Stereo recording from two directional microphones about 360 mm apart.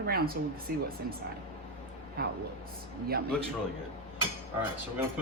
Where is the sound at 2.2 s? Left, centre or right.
Right.